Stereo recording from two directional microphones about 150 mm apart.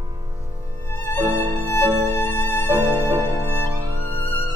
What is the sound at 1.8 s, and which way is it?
Music, 15° left (ahead or behind).